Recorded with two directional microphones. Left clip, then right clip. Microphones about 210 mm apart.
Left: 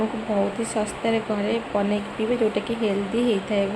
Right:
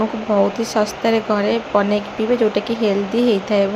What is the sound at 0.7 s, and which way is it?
Speech, 10° right (ahead or behind).